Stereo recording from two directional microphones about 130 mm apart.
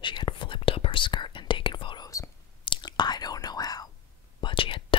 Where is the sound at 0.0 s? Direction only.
35° left (ahead or behind).